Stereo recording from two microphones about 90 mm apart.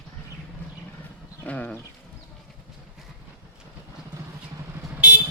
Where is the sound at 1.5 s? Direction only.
15° left (ahead or behind).